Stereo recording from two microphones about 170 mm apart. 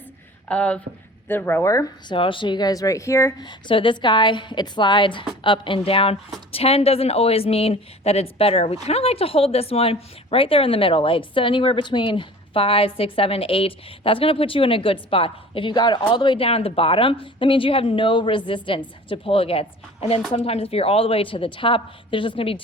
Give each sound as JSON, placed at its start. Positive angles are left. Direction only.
{"t": 0.4, "sound": "a woman's voice", "side_deg": 5}
{"t": 3.4, "sound": "a woman's voice", "side_deg": 30}